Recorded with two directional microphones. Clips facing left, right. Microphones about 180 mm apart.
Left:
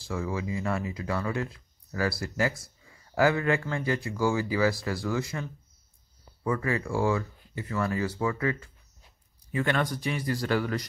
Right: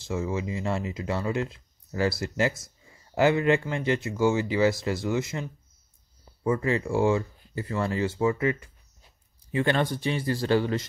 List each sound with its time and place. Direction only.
0.0 s speech: 25° right (ahead or behind)